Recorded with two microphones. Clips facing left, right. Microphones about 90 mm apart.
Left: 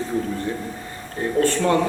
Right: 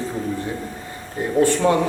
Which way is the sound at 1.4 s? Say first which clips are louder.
Right 3 dB; 15° right (ahead or behind).